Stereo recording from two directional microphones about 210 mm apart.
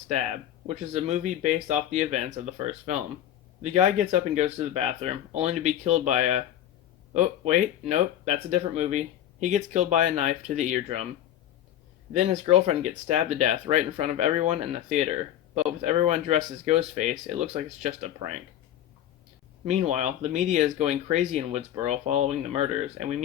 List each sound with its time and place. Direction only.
0.7 s speech: 30° right (ahead or behind)
12.1 s speech: 30° right (ahead or behind)
19.6 s speech: 35° right (ahead or behind)